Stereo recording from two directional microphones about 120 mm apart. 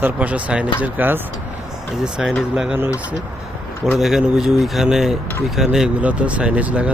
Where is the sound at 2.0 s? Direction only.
5° right (ahead or behind).